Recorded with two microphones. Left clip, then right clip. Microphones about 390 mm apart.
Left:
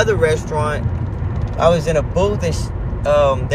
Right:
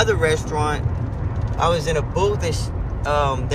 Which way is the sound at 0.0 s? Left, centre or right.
Centre.